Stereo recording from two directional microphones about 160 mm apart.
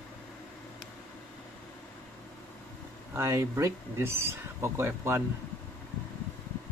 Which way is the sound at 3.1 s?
15° right (ahead or behind).